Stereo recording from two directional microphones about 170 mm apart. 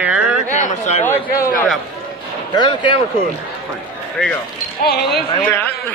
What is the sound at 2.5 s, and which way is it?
Speech, 25° left (ahead or behind).